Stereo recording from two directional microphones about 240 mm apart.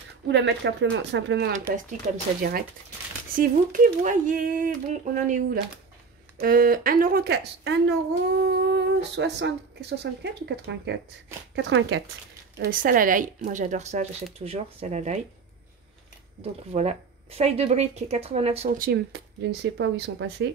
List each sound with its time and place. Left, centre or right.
0.3 s speech: right
2.1 s speech: right
3.3 s speech: right
12.5 s speech: right
16.7 s speech: right